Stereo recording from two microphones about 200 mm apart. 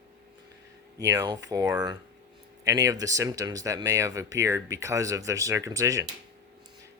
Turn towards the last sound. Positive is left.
turn(degrees=-15)  # may be behind; listen again after turning